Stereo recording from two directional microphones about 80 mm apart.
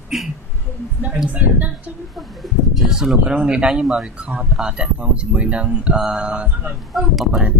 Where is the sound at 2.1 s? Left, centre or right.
Centre.